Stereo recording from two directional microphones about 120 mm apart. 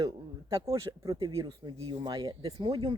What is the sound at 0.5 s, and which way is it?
Speech, 25° right (ahead or behind).